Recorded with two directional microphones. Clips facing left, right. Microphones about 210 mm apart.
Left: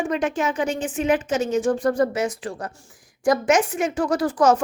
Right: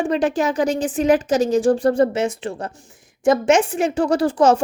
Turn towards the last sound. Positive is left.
turn(degrees=-25)  # may be behind; listen again after turning